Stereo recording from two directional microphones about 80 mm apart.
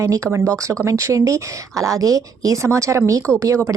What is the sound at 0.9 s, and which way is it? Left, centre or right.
Speech, right.